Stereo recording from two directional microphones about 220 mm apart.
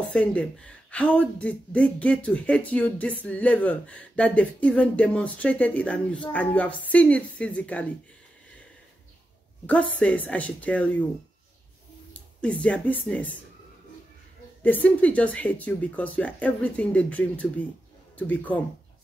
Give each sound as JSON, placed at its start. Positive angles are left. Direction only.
{"t": 0.0, "sound": "speech", "side_deg": 5}
{"t": 9.7, "sound": "speech", "side_deg": 5}
{"t": 12.1, "sound": "a sound", "side_deg": 5}
{"t": 12.6, "sound": "speech", "side_deg": 5}
{"t": 14.6, "sound": "speech", "side_deg": 5}